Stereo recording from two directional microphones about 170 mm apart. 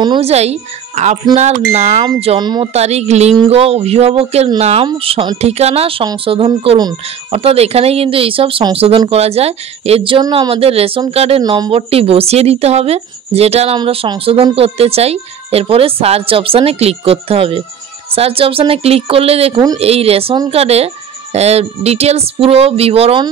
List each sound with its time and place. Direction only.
0.0 s speech: 25° right (ahead or behind)
0.3 s speech: 40° right (ahead or behind)
2.7 s speech: 40° right (ahead or behind)